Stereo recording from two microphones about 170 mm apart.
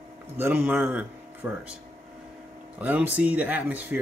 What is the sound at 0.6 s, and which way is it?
A man's voice, 5° right (ahead or behind).